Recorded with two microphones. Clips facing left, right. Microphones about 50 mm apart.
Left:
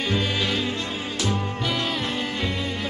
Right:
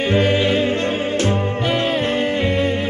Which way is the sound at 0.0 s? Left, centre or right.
Right.